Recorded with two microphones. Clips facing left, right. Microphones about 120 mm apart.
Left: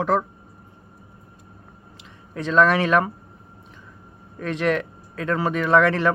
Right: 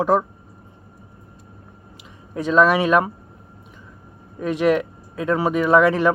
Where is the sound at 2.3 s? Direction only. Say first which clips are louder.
Right 2 dB; 10° right (ahead or behind).